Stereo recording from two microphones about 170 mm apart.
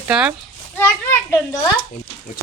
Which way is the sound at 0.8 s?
15° left (ahead or behind).